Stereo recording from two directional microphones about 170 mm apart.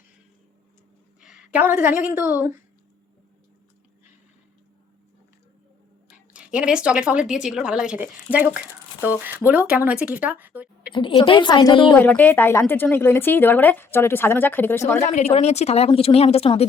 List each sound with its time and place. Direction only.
1.2 s a woman's voice: 5° right (ahead or behind)
6.1 s speech: 5° right (ahead or behind)
10.9 s a woman's voice: 30° left (ahead or behind)
11.9 s speech: 10° left (ahead or behind)
15.1 s speech: 40° left (ahead or behind)